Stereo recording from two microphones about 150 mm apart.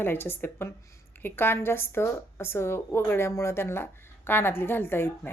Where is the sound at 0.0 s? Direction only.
15° left (ahead or behind).